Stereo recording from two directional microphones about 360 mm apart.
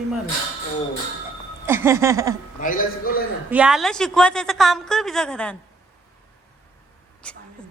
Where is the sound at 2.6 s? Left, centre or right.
Left.